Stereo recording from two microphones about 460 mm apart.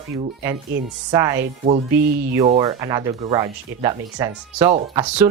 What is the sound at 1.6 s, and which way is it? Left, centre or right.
Speech, centre.